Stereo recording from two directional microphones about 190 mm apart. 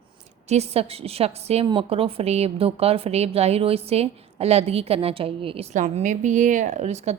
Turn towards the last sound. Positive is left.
turn(degrees=-35)  # may be behind; listen again after turning